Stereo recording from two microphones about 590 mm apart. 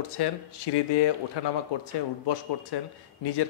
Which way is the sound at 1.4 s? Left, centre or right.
Left.